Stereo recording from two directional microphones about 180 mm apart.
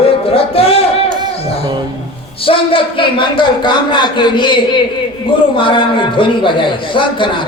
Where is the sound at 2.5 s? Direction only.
30° left (ahead or behind).